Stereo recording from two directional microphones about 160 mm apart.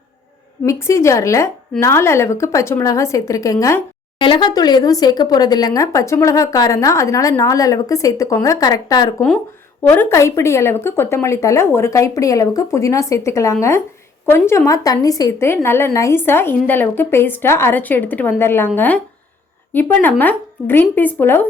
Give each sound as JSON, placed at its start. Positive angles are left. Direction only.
{"t": 0.6, "sound": "a woman's voice", "side_deg": 20}